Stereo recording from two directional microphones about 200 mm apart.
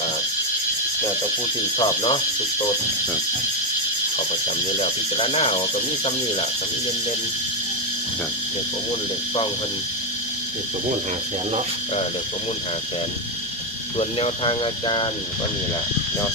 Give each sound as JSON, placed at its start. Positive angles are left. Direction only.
{"t": 1.8, "sound": "speech", "side_deg": 20}
{"t": 4.8, "sound": "speech", "side_deg": 30}
{"t": 14.0, "sound": "speech", "side_deg": 25}